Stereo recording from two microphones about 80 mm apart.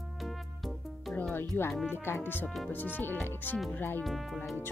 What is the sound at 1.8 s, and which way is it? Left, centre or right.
Speech, left.